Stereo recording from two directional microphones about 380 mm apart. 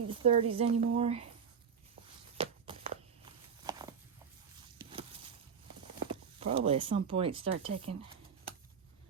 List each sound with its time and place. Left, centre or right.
0.1 s speech: centre
2.4 s a sound: centre
6.1 s speech: centre